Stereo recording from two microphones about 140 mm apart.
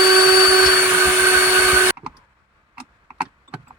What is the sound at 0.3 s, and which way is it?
Vacuum cleaner, 20° right (ahead or behind).